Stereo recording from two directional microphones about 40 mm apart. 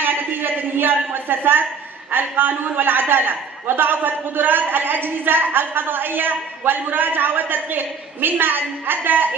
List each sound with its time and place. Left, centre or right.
0.0 s a man's voice: right